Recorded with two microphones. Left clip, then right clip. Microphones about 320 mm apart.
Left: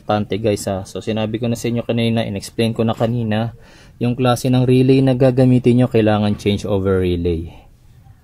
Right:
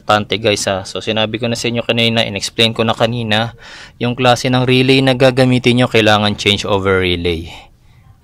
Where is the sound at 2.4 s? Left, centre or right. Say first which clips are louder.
Right 6 dB; right.